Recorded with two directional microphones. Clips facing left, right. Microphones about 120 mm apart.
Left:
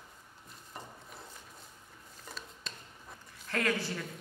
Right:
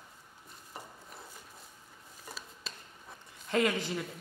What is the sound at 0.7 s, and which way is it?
Wood, 5° right (ahead or behind).